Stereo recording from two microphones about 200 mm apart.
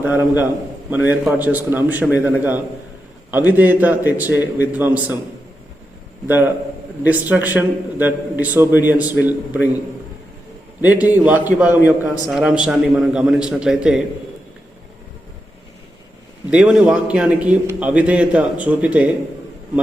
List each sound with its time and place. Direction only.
0.0 s a man's voice: 10° right (ahead or behind)
6.2 s a man's voice: 10° right (ahead or behind)
10.8 s a man's voice: 10° right (ahead or behind)
16.5 s a man's voice: 5° right (ahead or behind)